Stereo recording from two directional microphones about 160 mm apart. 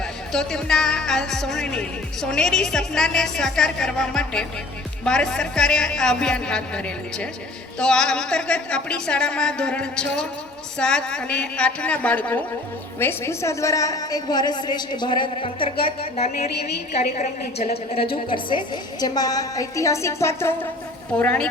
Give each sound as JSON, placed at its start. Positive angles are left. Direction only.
{"t": 0.3, "sound": "a woman's voice", "side_deg": 5}
{"t": 17.2, "sound": "a woman's voice", "side_deg": 65}
{"t": 18.3, "sound": "a woman's voice", "side_deg": 30}